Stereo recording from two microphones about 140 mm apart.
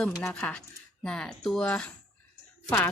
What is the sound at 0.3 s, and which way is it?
A woman's voice, 10° left (ahead or behind).